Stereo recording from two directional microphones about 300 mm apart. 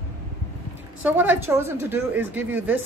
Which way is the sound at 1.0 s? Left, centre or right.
Centre.